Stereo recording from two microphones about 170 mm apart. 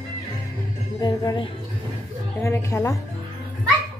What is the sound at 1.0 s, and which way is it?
Speech, 20° left (ahead or behind).